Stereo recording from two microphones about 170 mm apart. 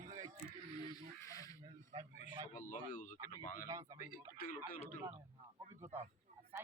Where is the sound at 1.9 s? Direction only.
30° right (ahead or behind).